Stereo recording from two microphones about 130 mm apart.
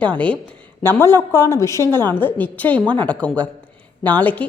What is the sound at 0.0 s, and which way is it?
A woman's voice, 10° left (ahead or behind).